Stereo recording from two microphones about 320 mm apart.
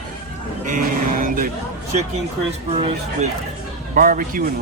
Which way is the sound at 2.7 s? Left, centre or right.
Centre.